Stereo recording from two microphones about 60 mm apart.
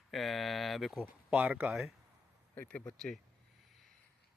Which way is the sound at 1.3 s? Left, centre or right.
Right.